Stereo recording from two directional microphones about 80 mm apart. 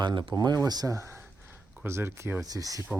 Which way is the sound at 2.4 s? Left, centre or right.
Right.